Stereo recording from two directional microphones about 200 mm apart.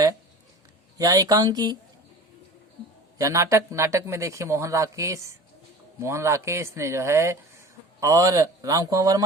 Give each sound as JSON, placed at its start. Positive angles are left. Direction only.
{"t": 0.9, "sound": "speech", "side_deg": -20}
{"t": 3.2, "sound": "speech", "side_deg": -15}